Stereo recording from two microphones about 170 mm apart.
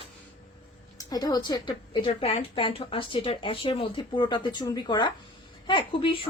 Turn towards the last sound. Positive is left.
turn(degrees=30)  # may be behind; listen again after turning